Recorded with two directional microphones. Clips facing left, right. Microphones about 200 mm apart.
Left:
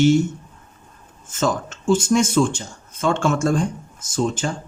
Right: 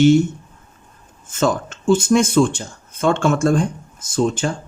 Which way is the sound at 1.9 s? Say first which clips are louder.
Right 3 dB; 55° right (ahead or behind).